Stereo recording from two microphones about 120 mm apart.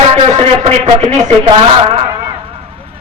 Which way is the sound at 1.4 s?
55° right (ahead or behind).